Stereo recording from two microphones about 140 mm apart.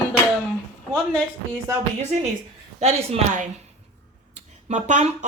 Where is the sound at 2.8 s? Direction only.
50° right (ahead or behind).